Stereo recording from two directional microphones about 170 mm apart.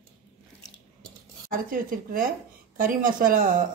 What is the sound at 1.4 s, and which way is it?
Speech, 55° right (ahead or behind).